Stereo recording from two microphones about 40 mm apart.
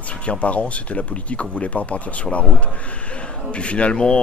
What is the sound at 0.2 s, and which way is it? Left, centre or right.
Speech, left.